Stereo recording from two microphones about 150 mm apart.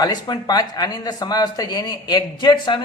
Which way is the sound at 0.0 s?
25° left (ahead or behind).